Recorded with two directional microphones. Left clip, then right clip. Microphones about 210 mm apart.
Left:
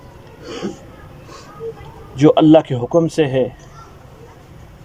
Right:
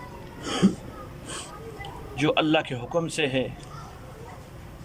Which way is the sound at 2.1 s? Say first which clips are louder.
Left 12 dB; 30° left (ahead or behind).